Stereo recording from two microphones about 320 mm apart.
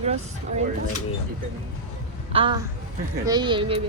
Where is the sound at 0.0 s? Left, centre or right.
Centre.